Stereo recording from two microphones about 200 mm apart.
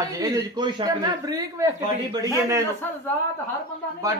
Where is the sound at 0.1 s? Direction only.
20° right (ahead or behind).